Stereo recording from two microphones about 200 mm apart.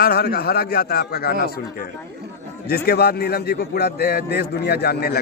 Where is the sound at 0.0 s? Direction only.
50° left (ahead or behind).